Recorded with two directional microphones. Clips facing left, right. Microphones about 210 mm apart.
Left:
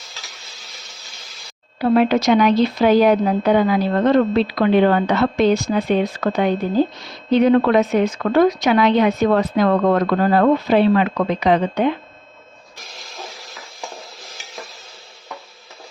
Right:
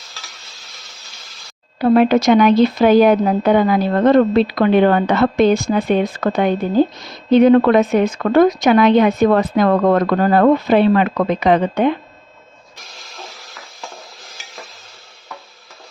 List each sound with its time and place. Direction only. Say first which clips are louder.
1.8 s a woman's voice: right 3 dB; 50° right (ahead or behind)